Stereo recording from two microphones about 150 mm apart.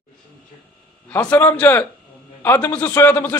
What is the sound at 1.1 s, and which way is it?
A man's voice, 10° left (ahead or behind).